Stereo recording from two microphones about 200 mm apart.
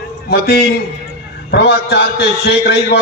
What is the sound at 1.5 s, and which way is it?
A man's voice, 55° left (ahead or behind).